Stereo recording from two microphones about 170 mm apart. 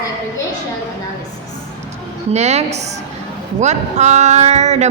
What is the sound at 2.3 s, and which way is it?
A woman's voice, 40° right (ahead or behind).